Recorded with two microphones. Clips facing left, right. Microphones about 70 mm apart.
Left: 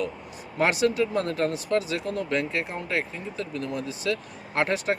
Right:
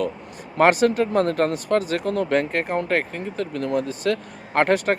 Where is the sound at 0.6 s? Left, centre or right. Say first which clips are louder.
Right 6 dB; right.